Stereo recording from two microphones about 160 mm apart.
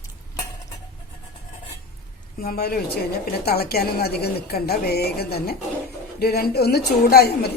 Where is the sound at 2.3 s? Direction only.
70° left (ahead or behind).